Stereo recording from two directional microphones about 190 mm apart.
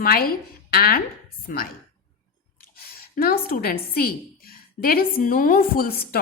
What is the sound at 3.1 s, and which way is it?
A woman's voice, 50° left (ahead or behind).